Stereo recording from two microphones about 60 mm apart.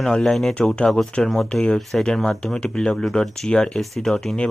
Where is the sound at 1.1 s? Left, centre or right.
Centre.